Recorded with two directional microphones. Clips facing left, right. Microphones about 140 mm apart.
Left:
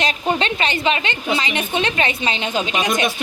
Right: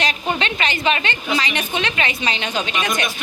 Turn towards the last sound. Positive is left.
turn(degrees=20)  # may be behind; listen again after turning